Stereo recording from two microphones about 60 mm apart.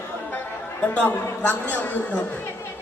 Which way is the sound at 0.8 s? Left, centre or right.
Left.